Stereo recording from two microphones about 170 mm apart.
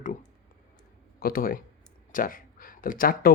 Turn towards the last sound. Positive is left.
turn(degrees=55)  # may be behind; listen again after turning